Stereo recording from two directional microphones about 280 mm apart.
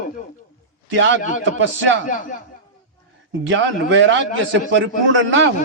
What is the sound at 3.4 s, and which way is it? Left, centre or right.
A man's voice, right.